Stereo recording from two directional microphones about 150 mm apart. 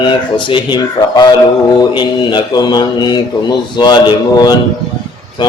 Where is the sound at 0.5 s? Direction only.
30° left (ahead or behind).